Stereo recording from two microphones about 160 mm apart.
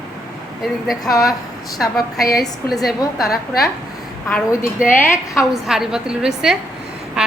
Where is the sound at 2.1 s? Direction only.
70° left (ahead or behind).